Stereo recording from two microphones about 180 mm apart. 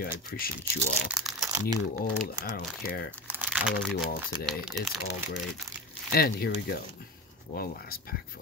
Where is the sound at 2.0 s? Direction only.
60° left (ahead or behind).